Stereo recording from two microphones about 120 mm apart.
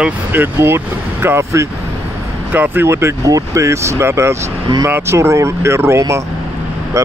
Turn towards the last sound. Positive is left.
turn(degrees=-25)  # may be behind; listen again after turning